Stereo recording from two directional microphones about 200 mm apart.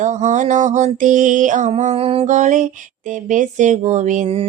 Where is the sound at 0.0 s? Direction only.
35° right (ahead or behind).